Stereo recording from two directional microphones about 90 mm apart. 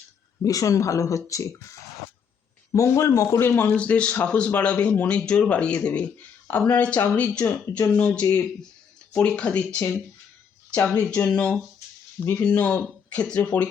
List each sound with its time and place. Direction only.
0.4 s speech: 40° left (ahead or behind)
2.7 s speech: 35° left (ahead or behind)
3.4 s speech: 20° left (ahead or behind)
10.9 s speech: 15° left (ahead or behind)